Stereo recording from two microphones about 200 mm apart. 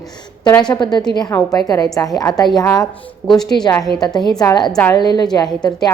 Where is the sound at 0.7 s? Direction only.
20° left (ahead or behind).